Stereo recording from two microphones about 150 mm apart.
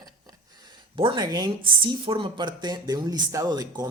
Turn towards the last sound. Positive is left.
turn(degrees=-25)  # may be behind; listen again after turning